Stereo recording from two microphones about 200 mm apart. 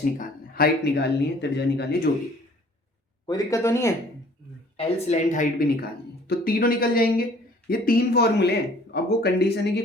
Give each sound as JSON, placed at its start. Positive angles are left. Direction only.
{"t": 0.0, "sound": "speech", "side_deg": 45}
{"t": 3.2, "sound": "speech", "side_deg": 15}
{"t": 4.8, "sound": "speech", "side_deg": 30}